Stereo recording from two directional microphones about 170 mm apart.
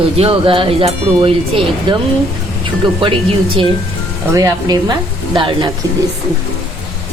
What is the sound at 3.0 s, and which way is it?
Speech, 30° right (ahead or behind).